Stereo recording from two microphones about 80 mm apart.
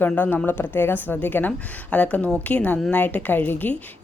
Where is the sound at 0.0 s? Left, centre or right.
Left.